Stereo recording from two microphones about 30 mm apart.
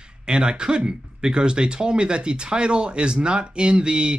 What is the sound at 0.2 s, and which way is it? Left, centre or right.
Speech, right.